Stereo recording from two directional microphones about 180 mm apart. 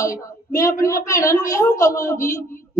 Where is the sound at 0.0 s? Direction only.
20° left (ahead or behind).